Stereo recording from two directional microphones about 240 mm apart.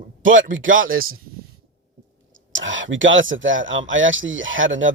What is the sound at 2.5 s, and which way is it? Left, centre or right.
Speech, right.